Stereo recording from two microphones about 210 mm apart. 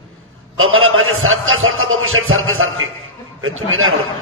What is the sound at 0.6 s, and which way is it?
A man's voice, 75° right (ahead or behind).